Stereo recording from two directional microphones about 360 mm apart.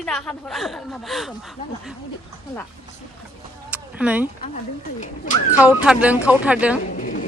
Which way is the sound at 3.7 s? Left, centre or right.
Centre.